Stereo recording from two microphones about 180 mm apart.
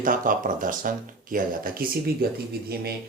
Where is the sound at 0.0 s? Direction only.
50° right (ahead or behind).